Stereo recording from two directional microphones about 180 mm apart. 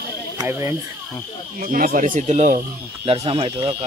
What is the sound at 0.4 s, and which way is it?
Speech, 20° right (ahead or behind).